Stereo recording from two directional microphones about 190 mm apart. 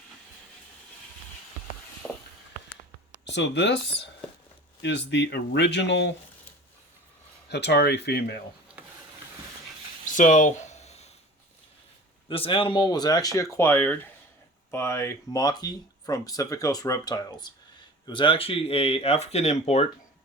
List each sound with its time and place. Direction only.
3.2 s speech: 65° left (ahead or behind)
7.5 s speech: 60° left (ahead or behind)
10.1 s a sound: 40° left (ahead or behind)
12.3 s speech: 30° left (ahead or behind)